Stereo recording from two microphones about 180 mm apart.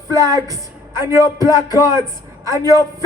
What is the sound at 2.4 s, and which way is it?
Speech, 20° right (ahead or behind).